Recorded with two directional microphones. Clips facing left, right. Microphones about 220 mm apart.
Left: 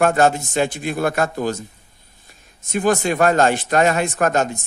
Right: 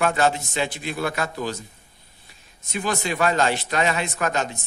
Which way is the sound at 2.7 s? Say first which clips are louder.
Left 8 dB; 50° left (ahead or behind).